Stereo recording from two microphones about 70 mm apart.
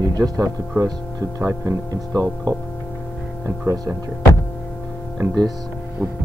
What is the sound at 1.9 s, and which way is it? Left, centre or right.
Speech, right.